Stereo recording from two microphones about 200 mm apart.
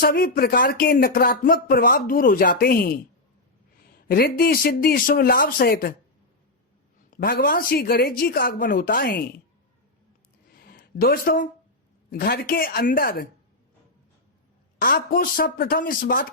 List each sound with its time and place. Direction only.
0.0 s speech: 50° left (ahead or behind)
4.1 s speech: 45° left (ahead or behind)
7.2 s speech: 50° left (ahead or behind)
10.5 s a sound: 50° left (ahead or behind)
12.1 s speech: 50° left (ahead or behind)
14.8 s speech: 45° left (ahead or behind)